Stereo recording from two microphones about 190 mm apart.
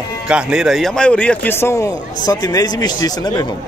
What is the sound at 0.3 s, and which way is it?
Speech, 5° right (ahead or behind).